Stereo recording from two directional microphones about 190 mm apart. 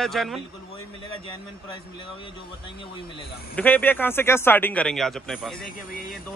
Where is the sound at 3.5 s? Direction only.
10° left (ahead or behind).